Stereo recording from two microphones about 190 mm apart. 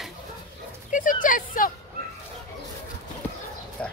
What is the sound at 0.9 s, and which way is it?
Speech, 45° left (ahead or behind).